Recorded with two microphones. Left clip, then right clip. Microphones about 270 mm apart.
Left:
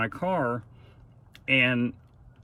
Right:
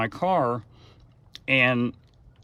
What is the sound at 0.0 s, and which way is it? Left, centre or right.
Speech, centre.